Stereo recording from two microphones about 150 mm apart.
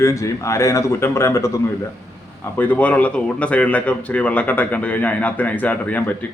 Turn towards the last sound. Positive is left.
turn(degrees=10)  # may be behind; listen again after turning